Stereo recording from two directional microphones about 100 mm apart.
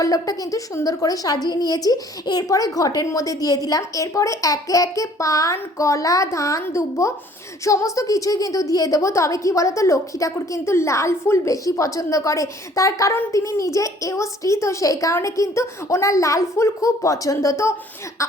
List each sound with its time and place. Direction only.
0.0 s a woman's voice: 35° left (ahead or behind)